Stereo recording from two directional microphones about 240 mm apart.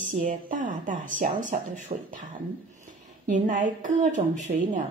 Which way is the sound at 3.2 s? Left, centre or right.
Right.